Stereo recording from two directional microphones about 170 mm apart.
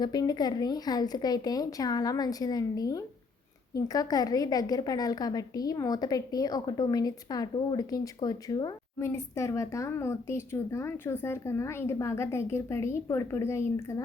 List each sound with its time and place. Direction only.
0.0 s a woman's voice: 25° left (ahead or behind)